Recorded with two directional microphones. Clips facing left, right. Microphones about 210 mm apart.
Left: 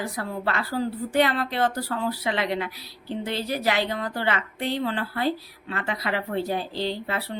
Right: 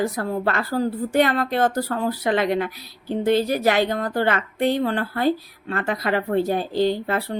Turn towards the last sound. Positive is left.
turn(degrees=-45)  # may be behind; listen again after turning